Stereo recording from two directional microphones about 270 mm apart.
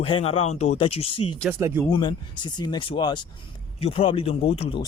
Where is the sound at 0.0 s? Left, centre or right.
Centre.